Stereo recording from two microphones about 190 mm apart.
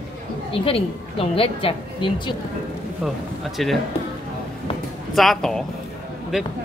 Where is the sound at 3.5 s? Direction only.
Centre (ahead or behind).